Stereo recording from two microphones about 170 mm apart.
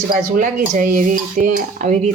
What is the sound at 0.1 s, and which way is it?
Speech, 50° right (ahead or behind).